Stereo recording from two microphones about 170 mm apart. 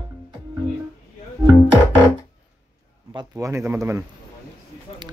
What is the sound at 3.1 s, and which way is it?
Speech, 20° right (ahead or behind).